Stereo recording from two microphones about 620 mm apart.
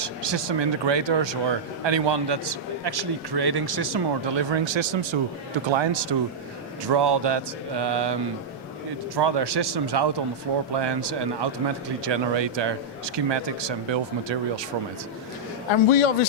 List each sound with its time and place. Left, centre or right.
0.0 s speech: right
9.1 s speech: right
15.7 s a man's voice: left